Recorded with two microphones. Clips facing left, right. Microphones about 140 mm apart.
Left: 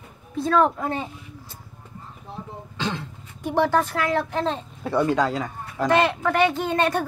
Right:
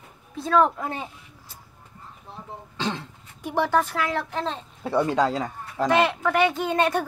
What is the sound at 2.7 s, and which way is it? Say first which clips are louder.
Throat clearing: even; 25° right (ahead or behind).